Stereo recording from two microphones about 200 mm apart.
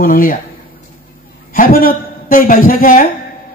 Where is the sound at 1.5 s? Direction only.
45° left (ahead or behind).